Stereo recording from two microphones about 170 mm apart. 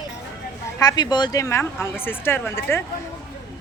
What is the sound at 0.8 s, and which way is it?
A woman's voice, 25° left (ahead or behind).